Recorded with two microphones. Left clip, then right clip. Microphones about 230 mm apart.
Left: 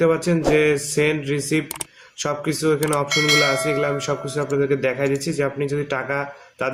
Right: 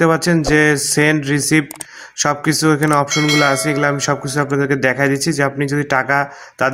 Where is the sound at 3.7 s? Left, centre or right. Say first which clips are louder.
Right 5 dB; right.